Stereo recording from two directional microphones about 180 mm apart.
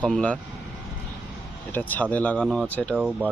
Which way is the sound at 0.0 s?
5° left (ahead or behind).